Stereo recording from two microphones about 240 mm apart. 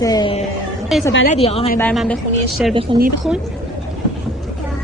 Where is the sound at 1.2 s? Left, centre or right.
Left.